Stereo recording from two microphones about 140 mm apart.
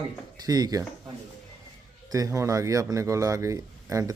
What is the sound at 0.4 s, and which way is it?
Speech, 25° right (ahead or behind).